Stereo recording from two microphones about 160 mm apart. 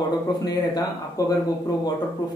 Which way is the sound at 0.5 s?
25° left (ahead or behind).